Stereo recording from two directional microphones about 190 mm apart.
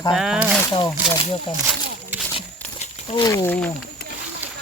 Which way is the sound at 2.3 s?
35° left (ahead or behind).